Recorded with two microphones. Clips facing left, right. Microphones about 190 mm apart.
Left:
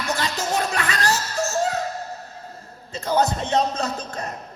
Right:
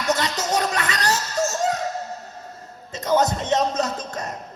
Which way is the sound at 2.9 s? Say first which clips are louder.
Right 1 dB; 20° right (ahead or behind).